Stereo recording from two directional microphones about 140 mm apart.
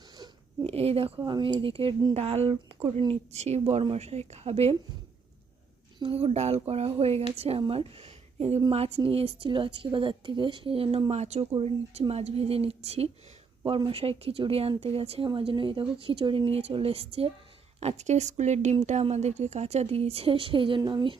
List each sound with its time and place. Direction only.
0.6 s speech: 45° right (ahead or behind)
1.2 s speech: 30° right (ahead or behind)
2.1 s speech: 50° right (ahead or behind)
3.0 s speech: 35° right (ahead or behind)
3.3 s speech: 50° right (ahead or behind)
6.0 s speech: 40° right (ahead or behind)